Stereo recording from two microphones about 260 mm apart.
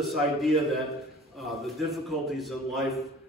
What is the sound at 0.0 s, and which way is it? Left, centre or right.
A man's voice, centre.